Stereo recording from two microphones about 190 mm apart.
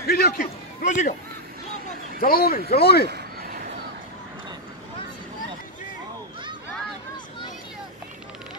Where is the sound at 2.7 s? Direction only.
55° left (ahead or behind).